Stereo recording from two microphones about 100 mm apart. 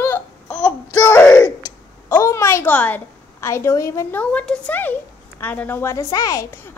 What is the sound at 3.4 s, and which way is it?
Speech, 25° left (ahead or behind).